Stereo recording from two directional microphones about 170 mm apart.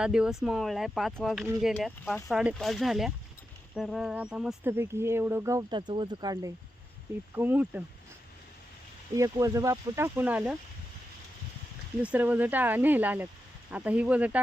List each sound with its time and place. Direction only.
0.0 s speech: 5° right (ahead or behind); by 6.5 s 20° right (ahead or behind)
7.3 s speech: 10° right (ahead or behind)
9.1 s speech: 20° right (ahead or behind)
12.0 s speech: 10° right (ahead or behind)